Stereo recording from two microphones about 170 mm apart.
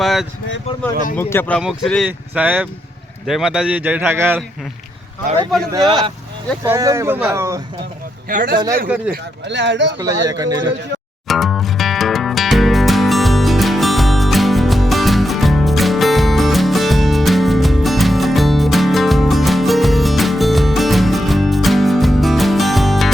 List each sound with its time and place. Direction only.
0.0 s speech: centre (ahead or behind)
1.1 s speech: 15° left (ahead or behind)
1.6 s a man's voice: centre (ahead or behind)
5.7 s a man's voice: 25° right (ahead or behind)
8.3 s speech: 50° right (ahead or behind)
9.0 s speech: 90° right
10.2 s a man's voice: 20° right (ahead or behind)
11.3 s music: centre (ahead or behind)